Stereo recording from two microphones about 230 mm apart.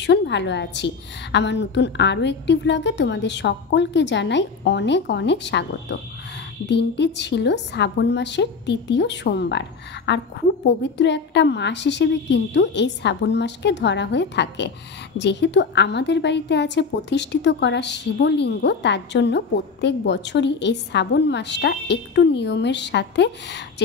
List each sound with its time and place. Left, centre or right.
0.0 s a woman's voice: left